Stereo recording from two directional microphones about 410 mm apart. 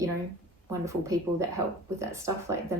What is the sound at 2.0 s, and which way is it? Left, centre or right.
Speech, centre.